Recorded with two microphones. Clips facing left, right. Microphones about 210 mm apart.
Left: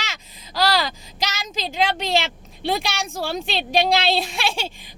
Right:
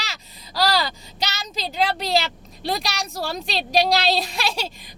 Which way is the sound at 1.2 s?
35° right (ahead or behind).